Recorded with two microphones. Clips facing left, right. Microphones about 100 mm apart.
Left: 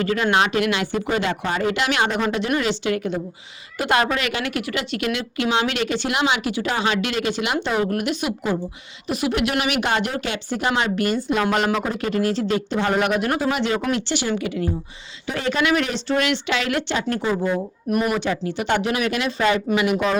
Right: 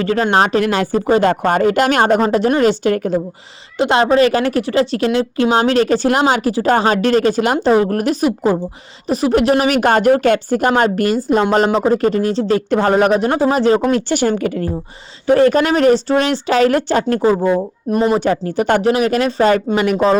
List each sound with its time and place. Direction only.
0.0 s speech: 35° right (ahead or behind)
3.8 s a woman's voice: 30° right (ahead or behind)
12.5 s speech: 50° right (ahead or behind)
12.9 s a woman's voice: 35° right (ahead or behind)
14.1 s a woman's voice: 45° right (ahead or behind)
17.5 s speech: 30° right (ahead or behind)
18.2 s a woman's voice: 45° right (ahead or behind)